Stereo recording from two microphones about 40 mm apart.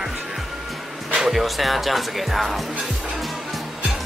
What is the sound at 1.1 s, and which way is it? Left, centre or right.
Speech, centre.